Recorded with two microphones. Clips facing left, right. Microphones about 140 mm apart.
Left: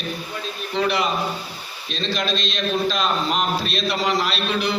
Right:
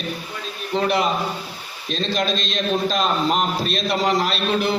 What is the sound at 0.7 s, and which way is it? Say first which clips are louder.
A man's voice: right 2 dB; 45° right (ahead or behind).